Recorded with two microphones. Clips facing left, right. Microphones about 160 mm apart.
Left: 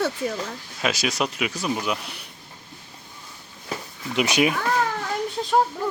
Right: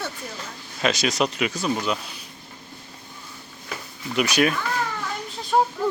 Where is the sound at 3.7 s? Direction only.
20° left (ahead or behind).